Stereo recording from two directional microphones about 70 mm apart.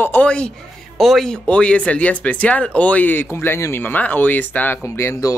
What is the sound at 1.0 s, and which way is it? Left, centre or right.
Speech, centre.